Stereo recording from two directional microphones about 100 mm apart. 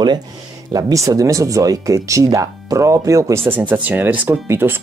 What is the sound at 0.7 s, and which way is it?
Speech, 35° right (ahead or behind).